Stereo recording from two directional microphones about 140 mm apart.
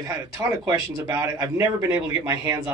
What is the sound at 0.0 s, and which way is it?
Speech, 25° right (ahead or behind).